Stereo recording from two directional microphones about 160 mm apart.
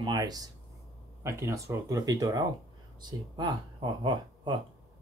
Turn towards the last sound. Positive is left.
turn(degrees=-30)  # may be behind; listen again after turning